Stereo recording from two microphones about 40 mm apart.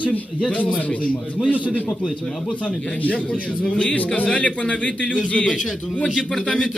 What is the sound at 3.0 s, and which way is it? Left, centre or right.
A man's voice, left.